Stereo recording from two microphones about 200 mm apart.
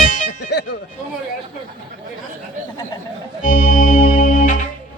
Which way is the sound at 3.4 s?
45° left (ahead or behind).